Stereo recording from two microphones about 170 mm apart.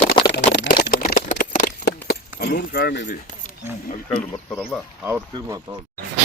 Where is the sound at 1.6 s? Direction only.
70° left (ahead or behind).